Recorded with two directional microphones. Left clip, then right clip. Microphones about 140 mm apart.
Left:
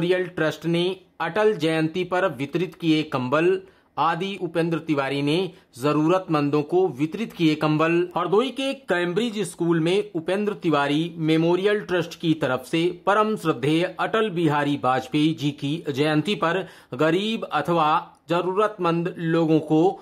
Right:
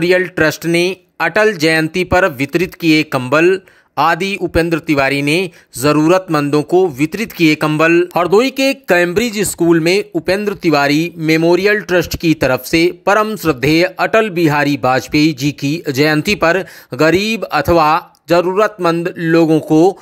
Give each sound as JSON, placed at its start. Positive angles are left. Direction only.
{"t": 0.0, "sound": "speech", "side_deg": -35}